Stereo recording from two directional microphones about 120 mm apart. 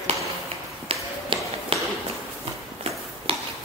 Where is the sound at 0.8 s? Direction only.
50° right (ahead or behind).